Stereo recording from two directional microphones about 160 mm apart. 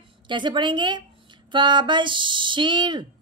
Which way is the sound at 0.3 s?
30° right (ahead or behind).